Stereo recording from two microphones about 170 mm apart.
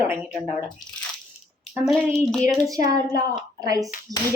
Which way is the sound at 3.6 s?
20° right (ahead or behind).